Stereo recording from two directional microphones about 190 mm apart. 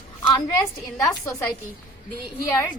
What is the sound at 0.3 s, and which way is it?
Speech, 20° left (ahead or behind).